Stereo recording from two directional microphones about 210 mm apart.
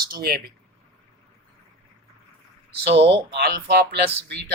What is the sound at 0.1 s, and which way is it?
Speech, 45° right (ahead or behind).